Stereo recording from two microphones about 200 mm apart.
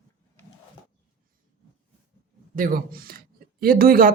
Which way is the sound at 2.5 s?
45° right (ahead or behind).